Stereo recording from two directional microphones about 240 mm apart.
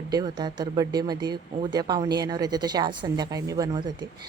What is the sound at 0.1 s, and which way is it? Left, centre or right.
Speech, centre.